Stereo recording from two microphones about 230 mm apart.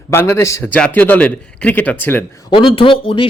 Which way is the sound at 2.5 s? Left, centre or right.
Left.